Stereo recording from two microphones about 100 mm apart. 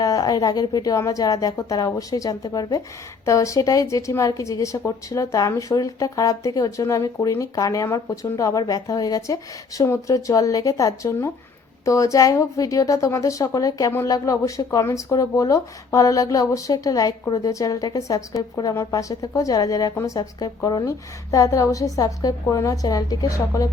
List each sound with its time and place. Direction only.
0.0 s speech: 35° left (ahead or behind)